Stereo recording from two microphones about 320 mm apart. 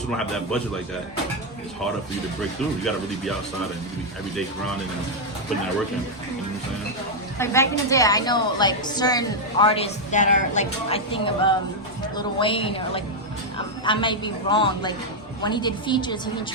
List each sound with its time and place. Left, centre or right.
7.3 s a woman's voice: centre